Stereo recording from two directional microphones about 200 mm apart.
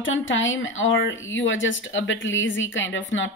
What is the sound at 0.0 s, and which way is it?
Speech, 75° left (ahead or behind).